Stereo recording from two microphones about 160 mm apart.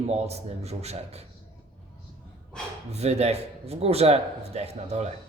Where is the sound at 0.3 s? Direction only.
40° right (ahead or behind).